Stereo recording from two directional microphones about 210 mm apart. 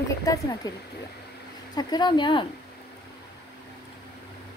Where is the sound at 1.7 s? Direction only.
20° left (ahead or behind).